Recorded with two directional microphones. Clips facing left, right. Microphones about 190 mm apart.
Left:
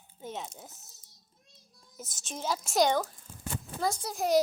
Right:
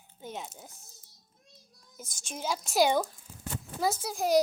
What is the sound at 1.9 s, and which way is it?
A woman's voice, centre (ahead or behind).